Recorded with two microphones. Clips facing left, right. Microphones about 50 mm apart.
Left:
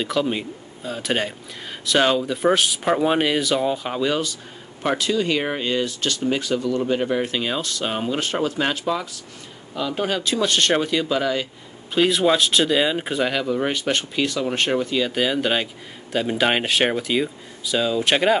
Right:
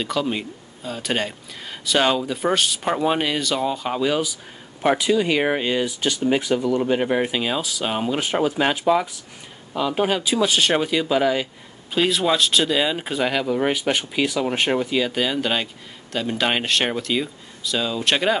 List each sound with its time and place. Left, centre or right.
0.0 s speech: centre; by 7.2 s right
7.2 s speech: centre
8.2 s speech: centre
11.9 s speech: centre
15.0 s speech: centre